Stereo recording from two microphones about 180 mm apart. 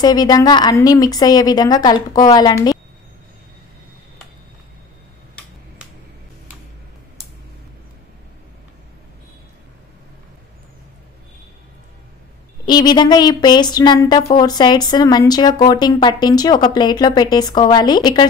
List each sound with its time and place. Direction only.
0.0 s speech: 20° left (ahead or behind)
12.6 s speech: 25° left (ahead or behind)